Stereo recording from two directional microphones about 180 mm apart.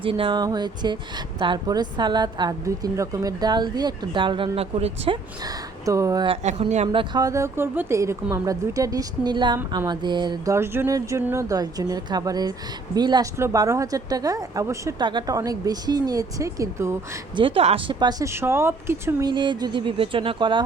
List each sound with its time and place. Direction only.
0.0 s speech: 30° right (ahead or behind)
6.8 s speech: 25° right (ahead or behind)
17.3 s speech: 30° right (ahead or behind); by 19.3 s 15° right (ahead or behind)
19.3 s speech: 25° right (ahead or behind)